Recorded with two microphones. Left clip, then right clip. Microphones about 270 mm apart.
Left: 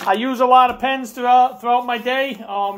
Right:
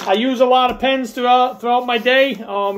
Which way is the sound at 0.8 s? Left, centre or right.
Centre.